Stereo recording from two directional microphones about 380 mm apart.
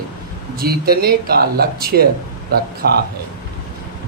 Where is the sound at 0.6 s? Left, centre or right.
Right.